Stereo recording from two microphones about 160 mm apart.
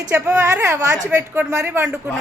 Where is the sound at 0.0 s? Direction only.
20° right (ahead or behind).